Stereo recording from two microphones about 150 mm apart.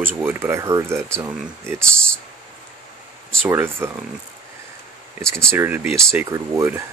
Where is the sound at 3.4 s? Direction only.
15° right (ahead or behind).